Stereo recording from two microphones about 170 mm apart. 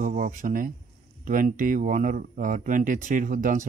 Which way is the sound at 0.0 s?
50° right (ahead or behind).